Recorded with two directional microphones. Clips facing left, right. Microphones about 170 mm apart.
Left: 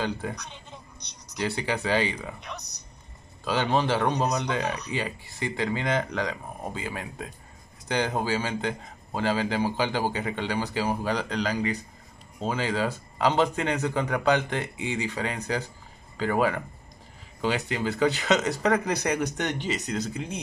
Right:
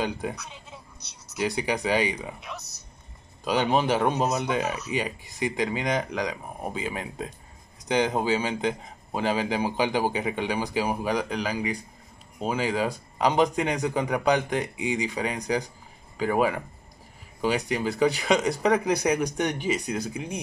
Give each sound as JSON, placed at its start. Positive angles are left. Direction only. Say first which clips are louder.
{"t": 0.0, "sound": "speech", "louder": "right 1 dB", "side_deg": -15}
{"t": 0.4, "sound": "a sound", "louder": "even", "side_deg": -5}
{"t": 1.4, "sound": "speech", "louder": "right 2 dB", "side_deg": -15}
{"t": 3.4, "sound": "speech", "louder": "right 2 dB", "side_deg": -15}
{"t": 4.6, "sound": "speech", "louder": "even", "side_deg": -5}
{"t": 4.9, "sound": "speech", "louder": "right 2 dB", "side_deg": -15}